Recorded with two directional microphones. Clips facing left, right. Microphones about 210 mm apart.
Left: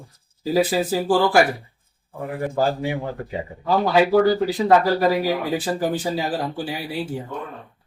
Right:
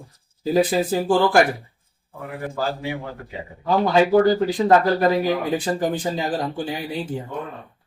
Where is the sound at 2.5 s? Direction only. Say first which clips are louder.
Left 5 dB; 45° left (ahead or behind).